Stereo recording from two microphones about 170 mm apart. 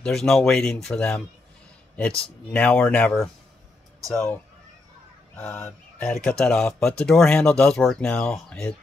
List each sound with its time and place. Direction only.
0.0 s speech: 5° left (ahead or behind)